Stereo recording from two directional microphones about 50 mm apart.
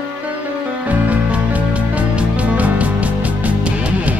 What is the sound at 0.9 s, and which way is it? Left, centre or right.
Music, right.